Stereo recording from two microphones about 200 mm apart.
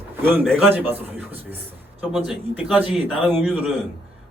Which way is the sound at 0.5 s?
10° right (ahead or behind).